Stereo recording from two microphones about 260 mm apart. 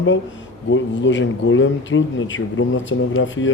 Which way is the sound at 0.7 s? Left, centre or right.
Left.